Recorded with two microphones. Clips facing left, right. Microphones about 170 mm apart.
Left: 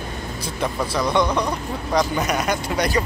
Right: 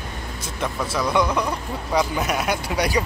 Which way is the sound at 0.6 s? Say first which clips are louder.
Left 2 dB; 5° right (ahead or behind).